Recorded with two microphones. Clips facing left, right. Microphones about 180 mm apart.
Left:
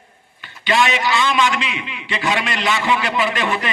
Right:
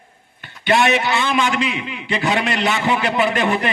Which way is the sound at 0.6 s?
60° right (ahead or behind).